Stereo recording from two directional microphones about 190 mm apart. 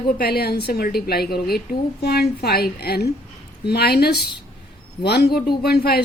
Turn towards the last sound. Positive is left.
turn(degrees=55)  # may be behind; listen again after turning